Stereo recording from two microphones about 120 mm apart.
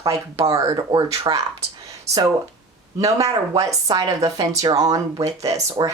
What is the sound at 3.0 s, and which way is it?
Speech, 30° right (ahead or behind).